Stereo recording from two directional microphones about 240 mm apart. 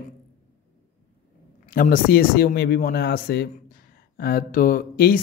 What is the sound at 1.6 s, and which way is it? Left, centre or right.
Speech, left.